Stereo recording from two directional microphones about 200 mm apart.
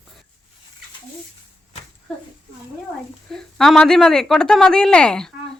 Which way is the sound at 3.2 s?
Centre (ahead or behind).